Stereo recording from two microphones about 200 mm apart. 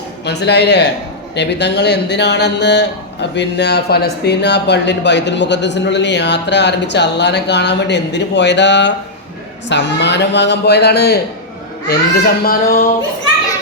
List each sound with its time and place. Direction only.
0.3 s a man's voice: 55° left (ahead or behind)